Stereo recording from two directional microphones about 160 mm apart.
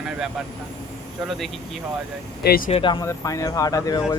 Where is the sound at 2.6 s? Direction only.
35° left (ahead or behind).